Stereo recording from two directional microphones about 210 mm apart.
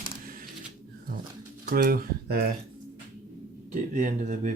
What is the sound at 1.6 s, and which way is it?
Speech, 45° right (ahead or behind).